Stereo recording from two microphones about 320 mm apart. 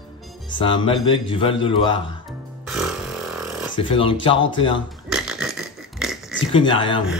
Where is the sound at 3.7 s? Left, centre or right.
Centre.